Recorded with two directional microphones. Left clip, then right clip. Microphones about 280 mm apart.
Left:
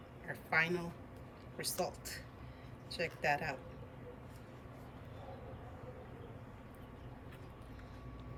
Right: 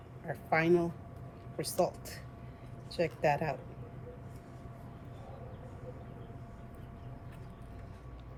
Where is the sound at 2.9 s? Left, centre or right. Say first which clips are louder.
Right 5 dB; centre.